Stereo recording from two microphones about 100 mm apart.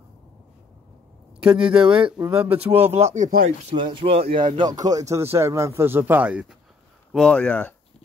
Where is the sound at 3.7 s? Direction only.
60° right (ahead or behind).